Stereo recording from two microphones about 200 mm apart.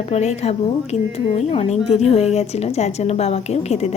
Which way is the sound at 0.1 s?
35° left (ahead or behind).